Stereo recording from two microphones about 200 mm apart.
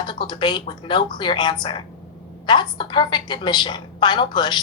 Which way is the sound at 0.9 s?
25° left (ahead or behind).